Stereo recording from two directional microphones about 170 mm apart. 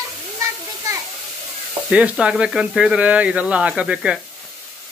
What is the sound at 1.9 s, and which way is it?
Speech, 5° right (ahead or behind).